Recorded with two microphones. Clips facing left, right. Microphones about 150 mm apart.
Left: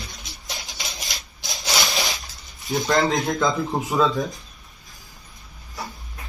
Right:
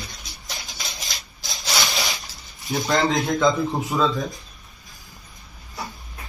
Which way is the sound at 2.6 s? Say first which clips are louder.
Left 1 dB; centre (ahead or behind).